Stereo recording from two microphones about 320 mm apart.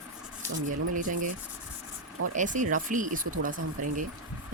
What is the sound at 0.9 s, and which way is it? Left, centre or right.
Speech, right.